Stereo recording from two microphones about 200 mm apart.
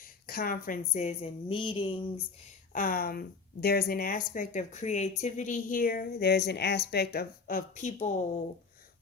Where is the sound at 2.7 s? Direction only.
45° left (ahead or behind).